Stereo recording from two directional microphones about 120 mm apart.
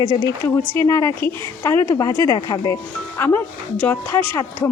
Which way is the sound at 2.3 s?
35° left (ahead or behind).